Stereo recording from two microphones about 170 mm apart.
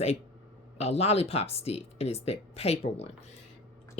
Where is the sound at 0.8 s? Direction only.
40° left (ahead or behind).